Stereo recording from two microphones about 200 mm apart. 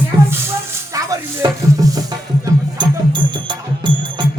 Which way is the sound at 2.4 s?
25° right (ahead or behind).